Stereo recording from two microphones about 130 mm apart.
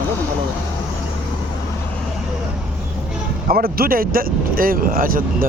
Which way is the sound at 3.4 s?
90° right.